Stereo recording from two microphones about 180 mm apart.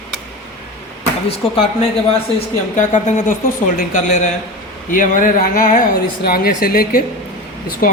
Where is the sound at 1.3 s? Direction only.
35° left (ahead or behind).